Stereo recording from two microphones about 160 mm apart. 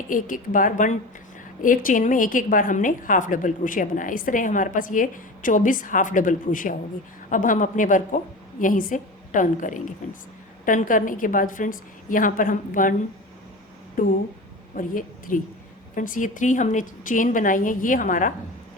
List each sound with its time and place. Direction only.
0.1 s a woman's voice: 55° left (ahead or behind)
14.0 s a woman's voice: 60° left (ahead or behind)